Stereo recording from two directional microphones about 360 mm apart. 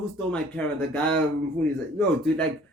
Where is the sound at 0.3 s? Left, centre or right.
Centre.